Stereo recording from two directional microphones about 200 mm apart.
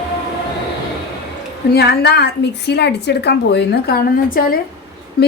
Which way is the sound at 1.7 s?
55° left (ahead or behind).